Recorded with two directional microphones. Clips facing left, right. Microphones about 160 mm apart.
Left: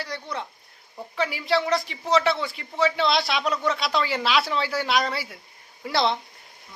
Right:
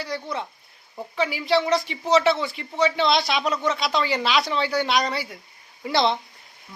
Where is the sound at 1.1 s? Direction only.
Centre (ahead or behind).